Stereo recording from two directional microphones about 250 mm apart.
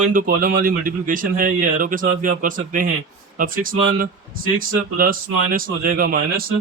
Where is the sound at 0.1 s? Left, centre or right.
Right.